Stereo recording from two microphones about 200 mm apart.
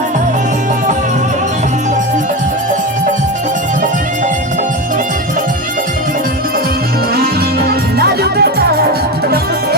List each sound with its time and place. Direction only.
7.9 s music: 50° right (ahead or behind)